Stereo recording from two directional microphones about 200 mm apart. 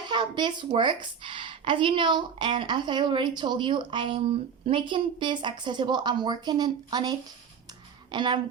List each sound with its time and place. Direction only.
0.1 s a woman's voice: 25° right (ahead or behind)